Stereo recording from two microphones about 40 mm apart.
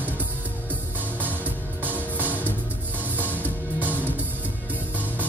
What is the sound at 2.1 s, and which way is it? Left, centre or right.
Music, right.